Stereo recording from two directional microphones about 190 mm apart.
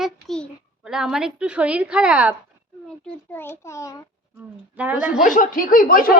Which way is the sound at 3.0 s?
10° left (ahead or behind).